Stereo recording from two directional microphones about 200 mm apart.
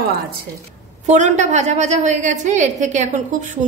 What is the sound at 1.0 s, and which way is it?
A woman's voice, 35° right (ahead or behind).